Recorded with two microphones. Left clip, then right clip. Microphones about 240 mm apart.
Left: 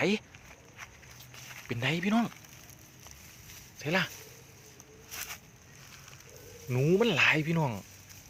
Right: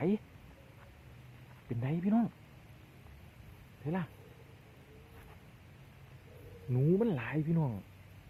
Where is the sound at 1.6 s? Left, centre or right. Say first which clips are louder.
Left 7 dB; centre.